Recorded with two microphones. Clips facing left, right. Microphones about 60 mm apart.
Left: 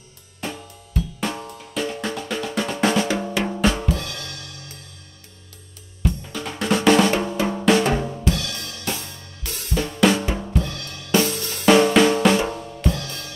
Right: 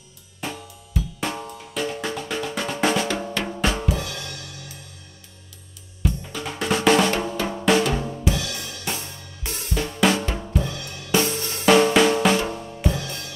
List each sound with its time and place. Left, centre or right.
0.4 s drum: centre
3.9 s drum kit: centre
6.0 s drum: centre
8.3 s drum kit: centre
9.7 s drum kit: centre
10.2 s drum: centre
10.6 s drum kit: centre
11.3 s drum: right
11.6 s drum: centre
12.9 s music: centre